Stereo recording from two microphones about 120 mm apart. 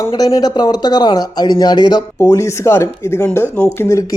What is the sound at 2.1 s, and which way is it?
Speech, 25° left (ahead or behind).